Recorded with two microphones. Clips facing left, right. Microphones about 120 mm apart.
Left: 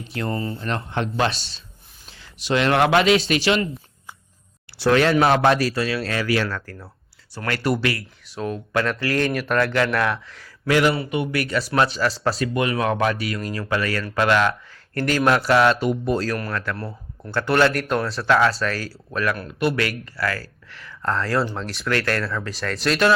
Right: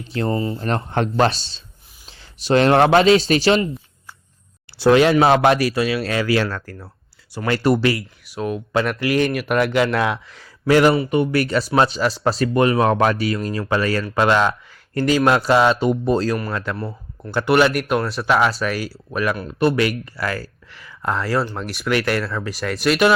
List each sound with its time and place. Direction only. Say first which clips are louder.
0.0 s speech: right 5 dB; 30° right (ahead or behind)
0.7 s speech: right 4 dB; 40° right (ahead or behind)
4.8 s speech: right 4 dB; 20° right (ahead or behind)
5.5 s speech: right 2 dB; 10° right (ahead or behind); by 6.5 s 25° right (ahead or behind)
6.5 s speech: right 1 dB; 10° right (ahead or behind)
7.3 s speech: right 5 dB; 25° right (ahead or behind)
8.4 s speech: right 3 dB; 10° right (ahead or behind)
9.6 s speech: right 3 dB; 15° right (ahead or behind)
16.7 s speech: right 3 dB; centre (ahead or behind)
17.3 s speech: right 3 dB; 15° right (ahead or behind)
19.5 s speech: right 7 dB; 35° right (ahead or behind)
19.7 s speech: right 5 dB; 20° right (ahead or behind)
20.7 s speech: right 1 dB; 10° right (ahead or behind)